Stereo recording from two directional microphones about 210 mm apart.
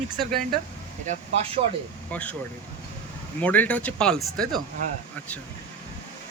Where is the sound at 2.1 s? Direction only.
5° left (ahead or behind).